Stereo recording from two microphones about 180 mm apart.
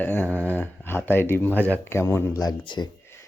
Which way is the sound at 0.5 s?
10° left (ahead or behind).